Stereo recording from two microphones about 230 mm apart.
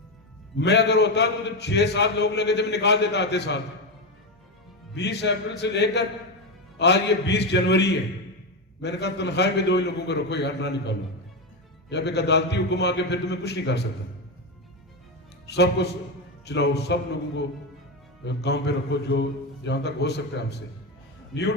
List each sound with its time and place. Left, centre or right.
0.6 s a man's voice: left
4.9 s a man's voice: left
15.4 s a man's voice: left